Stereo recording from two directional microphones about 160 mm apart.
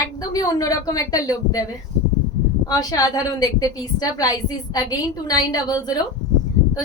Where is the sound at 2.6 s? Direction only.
25° left (ahead or behind).